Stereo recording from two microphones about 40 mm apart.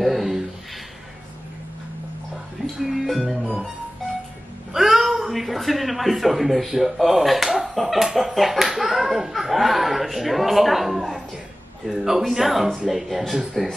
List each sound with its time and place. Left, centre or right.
0.0 s a sound: centre
2.8 s speech: centre
4.7 s speech: centre